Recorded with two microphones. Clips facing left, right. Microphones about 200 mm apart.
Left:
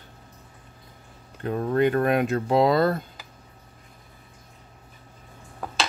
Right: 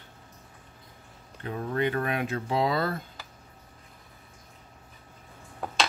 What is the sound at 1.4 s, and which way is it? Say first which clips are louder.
Speech: left 7 dB; 50° left (ahead or behind).